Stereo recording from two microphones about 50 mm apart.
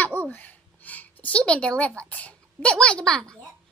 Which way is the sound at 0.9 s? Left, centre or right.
Left.